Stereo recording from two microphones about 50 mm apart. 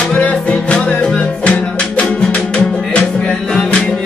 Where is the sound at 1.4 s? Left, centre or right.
Left.